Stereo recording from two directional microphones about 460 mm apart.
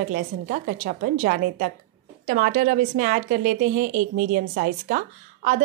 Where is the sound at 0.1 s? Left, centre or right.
Centre.